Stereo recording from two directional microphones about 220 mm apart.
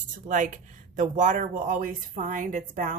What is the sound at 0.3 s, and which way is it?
A woman's voice, 35° right (ahead or behind).